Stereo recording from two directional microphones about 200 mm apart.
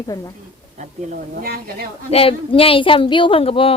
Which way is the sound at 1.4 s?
50° right (ahead or behind).